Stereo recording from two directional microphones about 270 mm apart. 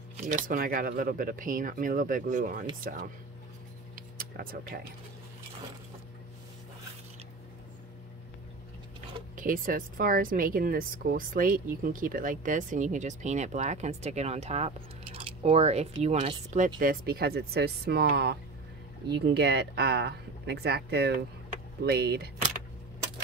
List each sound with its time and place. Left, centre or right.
0.2 s speech: right
3.9 s a sound: right
9.3 s speech: right